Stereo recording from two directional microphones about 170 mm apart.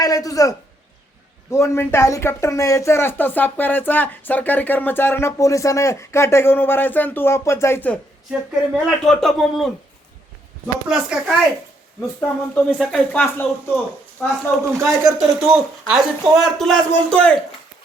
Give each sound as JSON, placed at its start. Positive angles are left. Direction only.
{"t": 0.0, "sound": "a man's voice", "side_deg": 20}
{"t": 8.3, "sound": "speech", "side_deg": 0}
{"t": 10.8, "sound": "speech", "side_deg": -5}
{"t": 13.2, "sound": "speech", "side_deg": 10}
{"t": 14.8, "sound": "speech", "side_deg": -15}
{"t": 15.4, "sound": "speech", "side_deg": 0}